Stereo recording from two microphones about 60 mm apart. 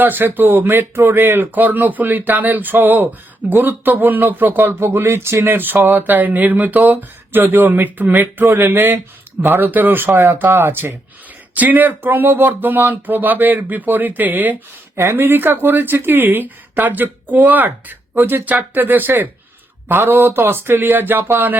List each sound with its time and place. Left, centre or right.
0.0 s speech: right
4.7 s speech: right